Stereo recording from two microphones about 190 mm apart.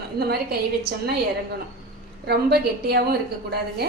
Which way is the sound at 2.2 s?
55° right (ahead or behind).